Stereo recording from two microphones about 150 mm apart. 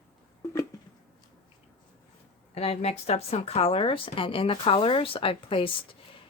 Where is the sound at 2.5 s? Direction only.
45° left (ahead or behind).